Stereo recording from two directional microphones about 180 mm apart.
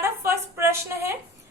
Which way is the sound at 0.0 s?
15° right (ahead or behind).